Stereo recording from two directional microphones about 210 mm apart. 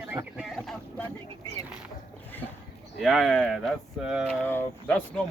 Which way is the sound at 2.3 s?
10° left (ahead or behind).